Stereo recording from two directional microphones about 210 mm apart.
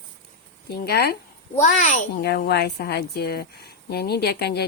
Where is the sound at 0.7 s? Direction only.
50° left (ahead or behind).